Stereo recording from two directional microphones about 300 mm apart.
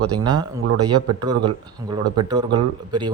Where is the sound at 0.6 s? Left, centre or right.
Right.